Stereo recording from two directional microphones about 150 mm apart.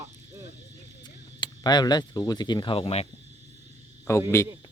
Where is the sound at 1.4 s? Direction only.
30° left (ahead or behind).